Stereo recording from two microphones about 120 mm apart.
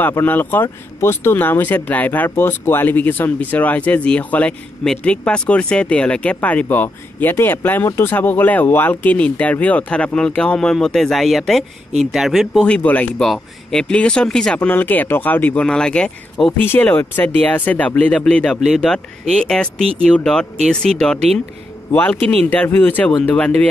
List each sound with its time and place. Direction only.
0.0 s speech: 15° left (ahead or behind); by 12.6 s centre (ahead or behind)
12.6 s speech: 10° left (ahead or behind)